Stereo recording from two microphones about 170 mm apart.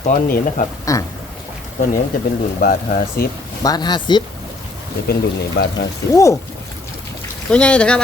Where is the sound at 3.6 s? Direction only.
25° left (ahead or behind).